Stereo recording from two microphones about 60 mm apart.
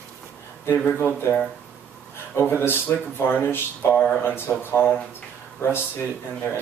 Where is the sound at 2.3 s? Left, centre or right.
Left.